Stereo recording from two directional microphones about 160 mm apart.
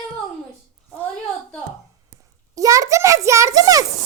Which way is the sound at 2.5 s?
20° right (ahead or behind).